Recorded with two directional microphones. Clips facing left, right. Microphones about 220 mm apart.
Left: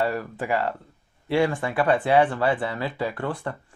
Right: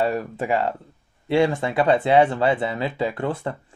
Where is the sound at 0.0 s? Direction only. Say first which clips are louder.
Right 3 dB; 20° right (ahead or behind).